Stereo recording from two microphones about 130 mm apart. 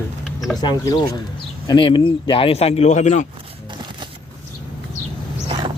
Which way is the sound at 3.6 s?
35° right (ahead or behind).